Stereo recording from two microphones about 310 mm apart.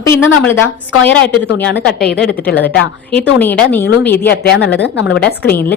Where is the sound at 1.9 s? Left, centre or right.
Centre.